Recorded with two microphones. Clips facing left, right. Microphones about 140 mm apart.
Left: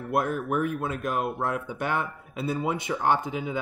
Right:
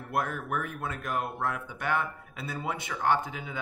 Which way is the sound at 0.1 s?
20° left (ahead or behind).